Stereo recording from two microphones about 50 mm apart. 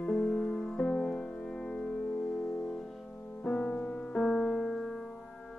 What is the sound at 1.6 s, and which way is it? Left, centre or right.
Music, left.